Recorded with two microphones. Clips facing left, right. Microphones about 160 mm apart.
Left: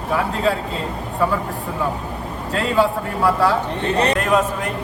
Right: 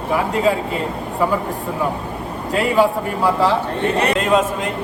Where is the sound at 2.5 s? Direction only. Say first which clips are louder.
Right 2 dB; 15° right (ahead or behind).